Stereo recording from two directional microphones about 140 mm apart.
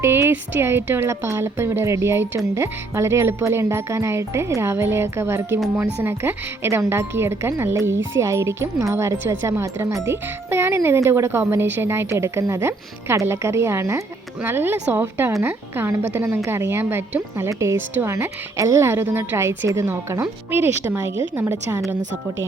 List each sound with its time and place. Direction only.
0.0 s a woman's voice: 20° right (ahead or behind)